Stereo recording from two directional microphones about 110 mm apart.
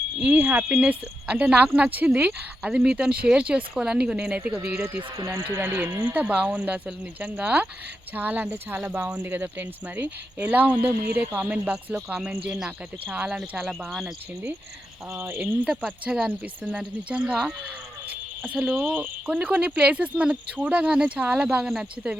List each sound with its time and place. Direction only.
0.2 s speech: 15° right (ahead or behind)
12.5 s cricket: 10° right (ahead or behind)
15.1 s speech: 25° right (ahead or behind)
15.4 s cricket: 5° right (ahead or behind)
16.7 s speech: 10° right (ahead or behind)